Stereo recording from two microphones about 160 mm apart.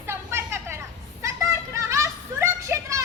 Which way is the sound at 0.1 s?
15° right (ahead or behind).